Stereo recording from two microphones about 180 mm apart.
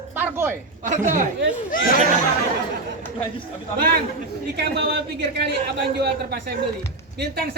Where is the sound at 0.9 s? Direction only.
45° right (ahead or behind).